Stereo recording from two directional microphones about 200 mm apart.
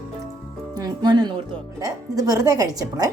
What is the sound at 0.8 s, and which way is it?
A woman's voice, 20° right (ahead or behind).